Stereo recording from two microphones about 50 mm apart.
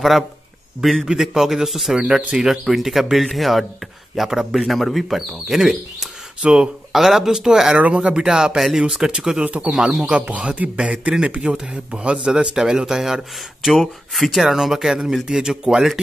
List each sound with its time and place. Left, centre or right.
1.0 s a man's voice: centre
2.0 s a man's voice: centre
4.6 s speech: centre
6.4 s a man's voice: centre
7.8 s a man's voice: right
9.4 s speech: right
9.7 s a man's voice: centre